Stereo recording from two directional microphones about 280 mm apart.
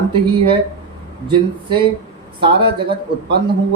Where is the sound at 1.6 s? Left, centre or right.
Centre.